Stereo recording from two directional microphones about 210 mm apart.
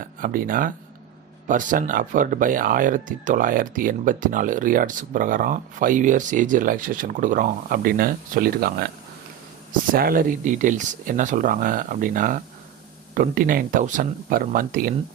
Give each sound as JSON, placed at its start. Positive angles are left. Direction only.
{"t": 0.0, "sound": "speech", "side_deg": -40}
{"t": 9.9, "sound": "speech", "side_deg": -45}